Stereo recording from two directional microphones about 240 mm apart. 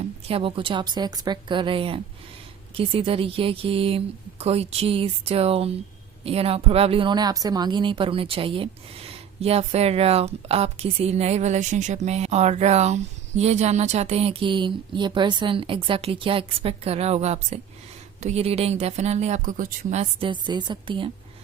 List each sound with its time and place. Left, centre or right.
0.3 s speech: right